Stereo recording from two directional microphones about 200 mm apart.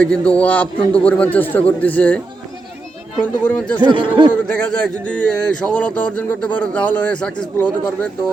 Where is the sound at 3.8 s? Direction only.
25° right (ahead or behind).